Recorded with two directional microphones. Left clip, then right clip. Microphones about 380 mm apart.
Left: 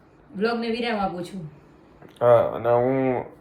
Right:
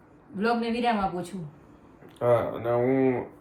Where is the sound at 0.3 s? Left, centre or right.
Centre.